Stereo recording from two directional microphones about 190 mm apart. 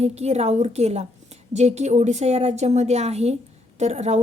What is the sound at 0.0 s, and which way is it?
A woman's voice, 35° right (ahead or behind).